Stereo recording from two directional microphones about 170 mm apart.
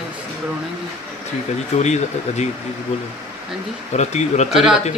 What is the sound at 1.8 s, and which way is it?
Speech, 40° left (ahead or behind).